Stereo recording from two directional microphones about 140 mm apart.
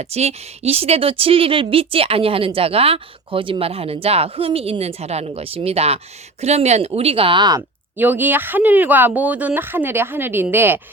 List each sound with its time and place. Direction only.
0.0 s a woman's voice: 50° right (ahead or behind); by 7.6 s 30° right (ahead or behind)
7.9 s speech: 15° right (ahead or behind)